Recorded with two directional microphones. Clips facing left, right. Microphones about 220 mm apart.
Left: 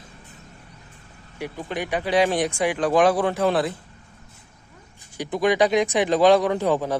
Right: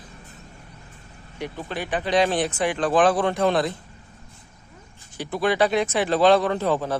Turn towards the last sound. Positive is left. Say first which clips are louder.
# left 1 dB
turn(degrees=15)  # may be behind; listen again after turning